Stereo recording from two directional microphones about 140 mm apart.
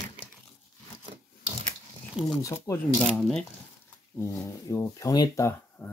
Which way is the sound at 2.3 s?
25° left (ahead or behind).